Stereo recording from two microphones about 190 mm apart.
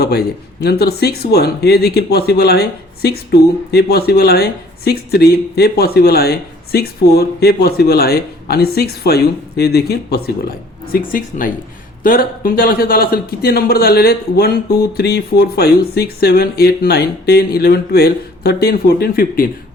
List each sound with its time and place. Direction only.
0.0 s a man's voice: 55° left (ahead or behind)